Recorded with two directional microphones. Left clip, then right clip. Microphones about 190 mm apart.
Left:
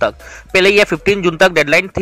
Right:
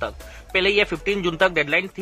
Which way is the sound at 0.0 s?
30° left (ahead or behind).